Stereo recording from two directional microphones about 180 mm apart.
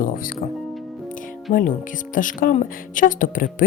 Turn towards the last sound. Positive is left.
turn(degrees=50)  # may be behind; listen again after turning